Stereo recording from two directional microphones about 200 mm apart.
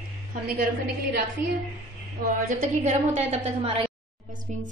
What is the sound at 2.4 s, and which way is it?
A woman's voice, 40° right (ahead or behind).